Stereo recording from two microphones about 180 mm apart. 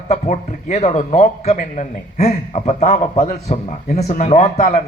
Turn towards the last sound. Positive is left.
turn(degrees=40)  # may be behind; listen again after turning